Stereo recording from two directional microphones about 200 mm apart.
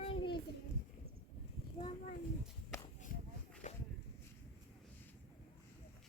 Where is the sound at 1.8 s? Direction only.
25° left (ahead or behind).